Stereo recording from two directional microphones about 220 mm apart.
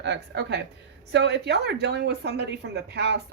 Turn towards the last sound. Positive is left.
turn(degrees=-50)  # may be behind; listen again after turning